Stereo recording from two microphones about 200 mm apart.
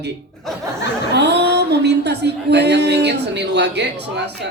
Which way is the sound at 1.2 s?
55° right (ahead or behind).